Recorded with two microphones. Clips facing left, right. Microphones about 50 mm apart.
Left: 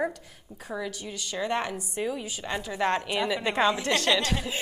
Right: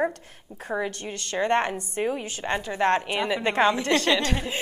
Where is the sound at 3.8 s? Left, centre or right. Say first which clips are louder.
Right 3 dB; centre.